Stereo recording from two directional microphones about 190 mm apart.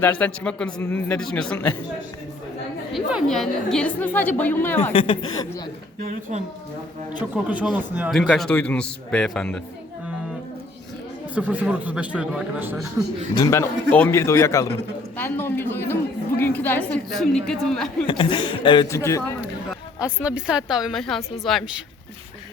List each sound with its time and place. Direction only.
0.0 s a woman's voice: 10° left (ahead or behind)
2.9 s a woman's voice: 5° right (ahead or behind)
4.8 s a man's voice: 30° left (ahead or behind)
6.0 s speech: 45° right (ahead or behind)
7.2 s a man's voice: 5° right (ahead or behind)
11.3 s a man's voice: 5° right (ahead or behind)
13.0 s a man's voice: 15° right (ahead or behind)
13.3 s a woman's voice: 15° left (ahead or behind)
18.0 s a man's voice: 25° left (ahead or behind)
20.0 s a man's voice: 5° right (ahead or behind)